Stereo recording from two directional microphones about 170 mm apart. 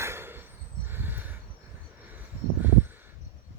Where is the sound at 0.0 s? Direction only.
15° right (ahead or behind).